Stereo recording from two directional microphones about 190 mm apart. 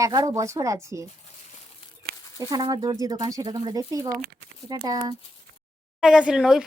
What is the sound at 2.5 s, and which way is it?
Speech, 20° right (ahead or behind).